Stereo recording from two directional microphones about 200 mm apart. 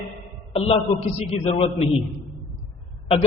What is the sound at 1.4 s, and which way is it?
Speech, 30° left (ahead or behind).